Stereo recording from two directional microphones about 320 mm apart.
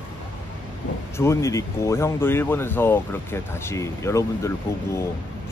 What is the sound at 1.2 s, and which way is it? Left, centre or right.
Speech, centre.